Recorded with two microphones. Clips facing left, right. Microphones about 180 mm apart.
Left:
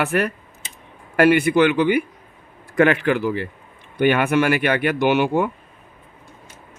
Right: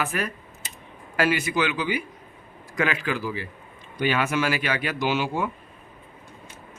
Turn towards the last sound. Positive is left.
turn(degrees=60)  # may be behind; listen again after turning